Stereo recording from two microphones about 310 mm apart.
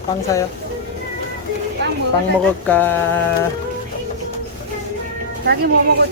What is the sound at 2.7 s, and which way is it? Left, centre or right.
Speech, centre.